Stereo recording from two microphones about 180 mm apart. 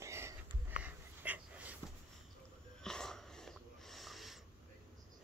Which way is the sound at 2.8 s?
5° left (ahead or behind).